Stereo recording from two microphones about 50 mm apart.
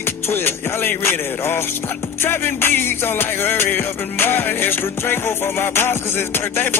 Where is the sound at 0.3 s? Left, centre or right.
Left.